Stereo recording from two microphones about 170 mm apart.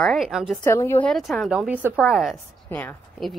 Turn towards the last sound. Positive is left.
turn(degrees=5)  # may be behind; listen again after turning